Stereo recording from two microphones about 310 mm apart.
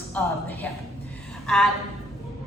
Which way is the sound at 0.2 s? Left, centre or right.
Centre.